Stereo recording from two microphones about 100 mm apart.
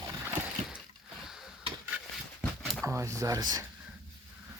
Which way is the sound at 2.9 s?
30° right (ahead or behind).